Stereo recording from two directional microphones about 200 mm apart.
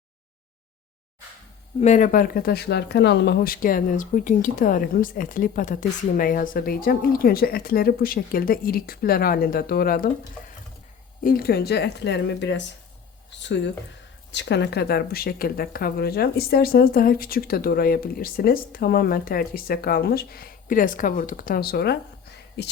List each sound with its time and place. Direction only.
1.8 s speech: 40° left (ahead or behind)
11.2 s speech: 45° left (ahead or behind)
14.3 s speech: 60° left (ahead or behind)